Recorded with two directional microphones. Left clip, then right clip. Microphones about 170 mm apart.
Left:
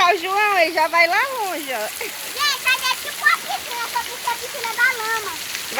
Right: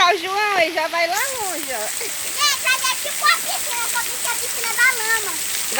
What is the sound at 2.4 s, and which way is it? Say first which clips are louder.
Splash: even; 80° right.